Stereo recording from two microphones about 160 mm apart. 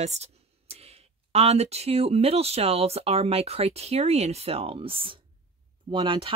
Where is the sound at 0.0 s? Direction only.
45° right (ahead or behind).